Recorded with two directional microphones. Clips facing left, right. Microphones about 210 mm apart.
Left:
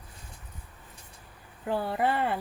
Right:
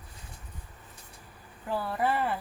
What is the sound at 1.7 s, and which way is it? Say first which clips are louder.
Speech: left 2 dB; 25° left (ahead or behind).